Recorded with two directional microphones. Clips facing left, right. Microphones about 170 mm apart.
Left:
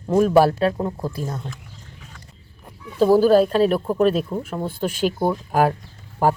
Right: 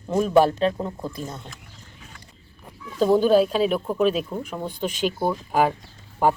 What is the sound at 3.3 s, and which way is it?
Speech, 10° right (ahead or behind).